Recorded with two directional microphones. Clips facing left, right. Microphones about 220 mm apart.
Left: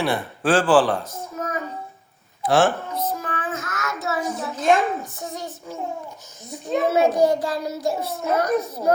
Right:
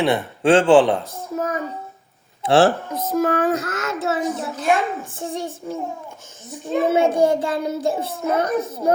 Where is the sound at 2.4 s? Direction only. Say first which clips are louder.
Right 3 dB; 30° right (ahead or behind).